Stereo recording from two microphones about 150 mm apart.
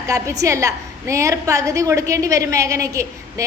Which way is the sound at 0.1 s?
20° right (ahead or behind).